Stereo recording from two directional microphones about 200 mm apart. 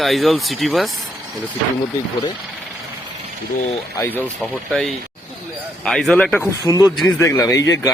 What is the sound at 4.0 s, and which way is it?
A man's voice, 10° left (ahead or behind).